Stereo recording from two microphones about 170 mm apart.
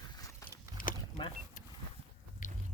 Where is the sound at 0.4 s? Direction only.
55° left (ahead or behind).